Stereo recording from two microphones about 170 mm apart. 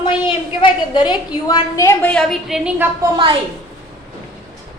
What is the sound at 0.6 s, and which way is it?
A woman's voice, 25° left (ahead or behind).